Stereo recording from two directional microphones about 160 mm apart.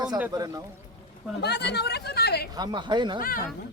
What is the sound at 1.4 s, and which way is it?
Speech, 90° left.